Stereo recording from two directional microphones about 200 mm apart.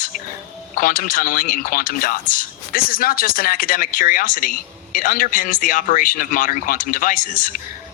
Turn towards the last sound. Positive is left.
turn(degrees=40)  # may be behind; listen again after turning